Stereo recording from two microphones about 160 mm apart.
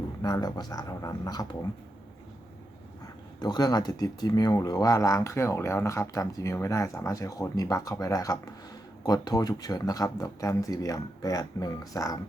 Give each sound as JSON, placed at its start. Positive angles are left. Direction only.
{"t": 0.2, "sound": "speech", "side_deg": 25}
{"t": 3.4, "sound": "speech", "side_deg": 25}